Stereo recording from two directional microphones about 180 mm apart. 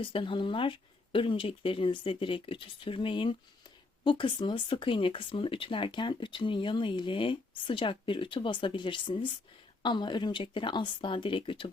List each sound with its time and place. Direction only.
0.0 s speech: 30° left (ahead or behind)